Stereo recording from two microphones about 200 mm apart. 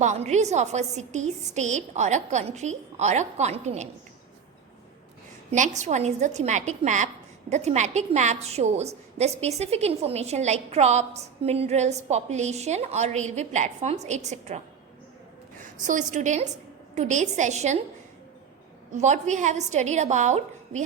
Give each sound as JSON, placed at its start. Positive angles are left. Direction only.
{"t": 0.0, "sound": "a woman's voice", "side_deg": -35}
{"t": 5.5, "sound": "a woman's voice", "side_deg": -35}
{"t": 15.8, "sound": "a woman's voice", "side_deg": -40}
{"t": 18.9, "sound": "a woman's voice", "side_deg": -35}